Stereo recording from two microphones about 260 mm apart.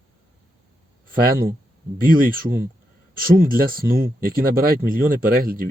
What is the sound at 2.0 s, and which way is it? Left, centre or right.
Speech, right.